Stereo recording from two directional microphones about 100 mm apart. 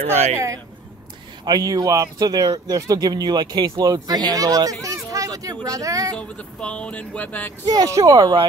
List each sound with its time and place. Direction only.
0.0 s speech: 90° right
1.4 s speech: 40° right (ahead or behind)
6.1 s speech: 10° left (ahead or behind)
7.6 s speech: 35° right (ahead or behind)